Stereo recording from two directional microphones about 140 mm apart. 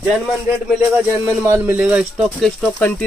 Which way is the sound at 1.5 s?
15° right (ahead or behind).